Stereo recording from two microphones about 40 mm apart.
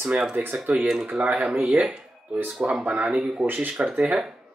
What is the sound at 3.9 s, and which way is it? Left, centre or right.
Speech, right.